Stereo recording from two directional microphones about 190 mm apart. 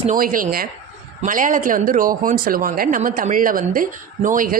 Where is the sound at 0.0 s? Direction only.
45° right (ahead or behind).